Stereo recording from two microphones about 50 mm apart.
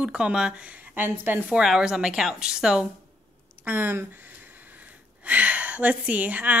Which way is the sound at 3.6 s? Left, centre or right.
Right.